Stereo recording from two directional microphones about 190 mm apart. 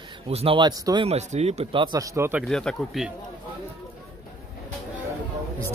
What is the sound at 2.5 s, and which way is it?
Speech, 5° left (ahead or behind).